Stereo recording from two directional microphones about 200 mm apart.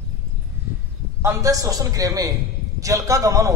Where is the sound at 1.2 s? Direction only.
15° right (ahead or behind).